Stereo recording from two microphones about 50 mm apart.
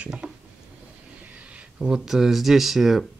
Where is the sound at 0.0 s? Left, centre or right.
Centre.